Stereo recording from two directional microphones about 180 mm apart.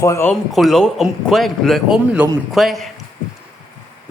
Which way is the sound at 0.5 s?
Centre (ahead or behind).